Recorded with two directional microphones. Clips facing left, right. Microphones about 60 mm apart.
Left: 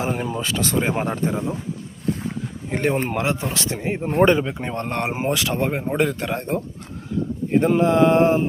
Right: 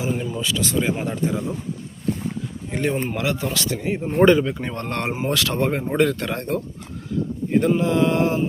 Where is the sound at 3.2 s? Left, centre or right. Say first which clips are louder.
Left 1 dB; left.